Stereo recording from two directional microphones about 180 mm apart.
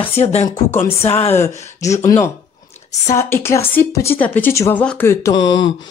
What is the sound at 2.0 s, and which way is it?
Speech, 15° left (ahead or behind).